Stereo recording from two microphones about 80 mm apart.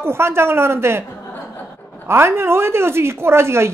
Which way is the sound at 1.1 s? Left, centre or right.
Left.